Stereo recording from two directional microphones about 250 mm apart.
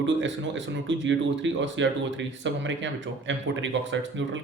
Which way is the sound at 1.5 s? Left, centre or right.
Right.